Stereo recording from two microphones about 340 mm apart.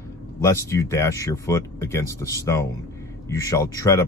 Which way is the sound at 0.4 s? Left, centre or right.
Centre.